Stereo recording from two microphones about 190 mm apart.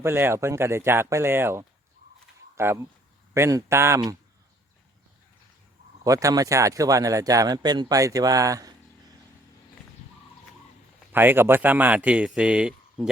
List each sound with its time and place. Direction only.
0.0 s speech: 10° right (ahead or behind)
6.1 s speech: 15° right (ahead or behind)
11.1 s speech: 10° right (ahead or behind)